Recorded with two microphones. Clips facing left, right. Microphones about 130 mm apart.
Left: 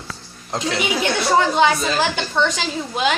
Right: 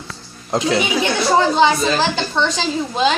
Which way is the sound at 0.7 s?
20° right (ahead or behind).